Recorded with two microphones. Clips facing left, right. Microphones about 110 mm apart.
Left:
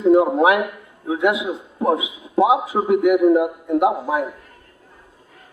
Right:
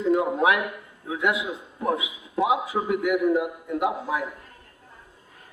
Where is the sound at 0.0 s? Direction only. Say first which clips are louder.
Left 7 dB; 30° left (ahead or behind).